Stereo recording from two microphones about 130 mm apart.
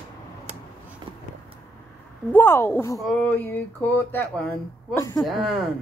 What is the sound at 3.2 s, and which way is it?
Speech, 15° left (ahead or behind).